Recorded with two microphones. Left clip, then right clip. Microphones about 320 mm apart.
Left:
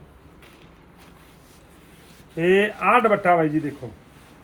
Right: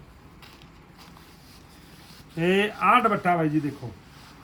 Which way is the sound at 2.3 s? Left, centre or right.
Centre.